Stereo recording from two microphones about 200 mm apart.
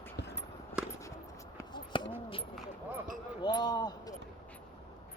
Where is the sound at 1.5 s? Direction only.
20° left (ahead or behind).